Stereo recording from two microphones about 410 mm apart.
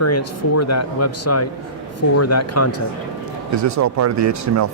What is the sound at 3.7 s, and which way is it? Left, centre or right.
Speech, right.